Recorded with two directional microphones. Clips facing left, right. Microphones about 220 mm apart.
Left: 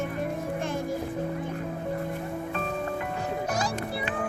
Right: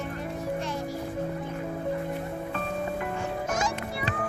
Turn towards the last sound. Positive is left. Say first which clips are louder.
# left 1 dB
turn(degrees=35)  # may be behind; listen again after turning